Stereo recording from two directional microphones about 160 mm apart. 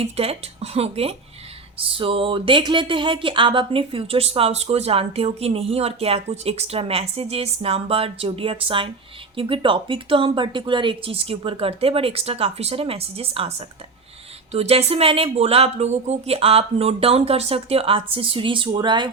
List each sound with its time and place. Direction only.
0.0 s speech: 40° right (ahead or behind)